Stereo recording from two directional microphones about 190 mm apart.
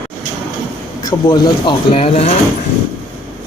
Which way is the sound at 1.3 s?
25° left (ahead or behind).